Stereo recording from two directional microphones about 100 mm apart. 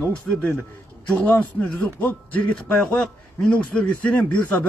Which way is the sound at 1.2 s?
15° left (ahead or behind).